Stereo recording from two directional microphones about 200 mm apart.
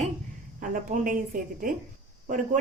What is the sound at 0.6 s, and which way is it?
A woman's voice, 40° right (ahead or behind).